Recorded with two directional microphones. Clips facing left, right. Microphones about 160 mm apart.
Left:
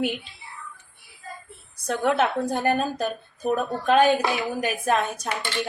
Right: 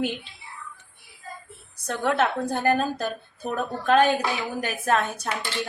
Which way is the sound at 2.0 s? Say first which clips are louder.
Left 1 dB; 10° left (ahead or behind).